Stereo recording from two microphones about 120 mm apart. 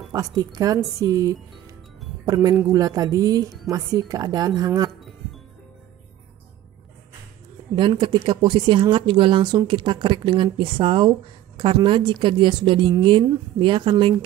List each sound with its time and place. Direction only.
0.1 s speech: 30° right (ahead or behind)
7.7 s speech: 40° right (ahead or behind)